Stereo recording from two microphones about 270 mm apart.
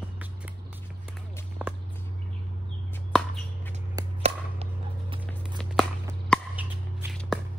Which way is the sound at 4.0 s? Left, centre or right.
Right.